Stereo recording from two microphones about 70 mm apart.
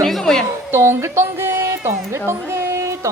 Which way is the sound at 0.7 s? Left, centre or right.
Right.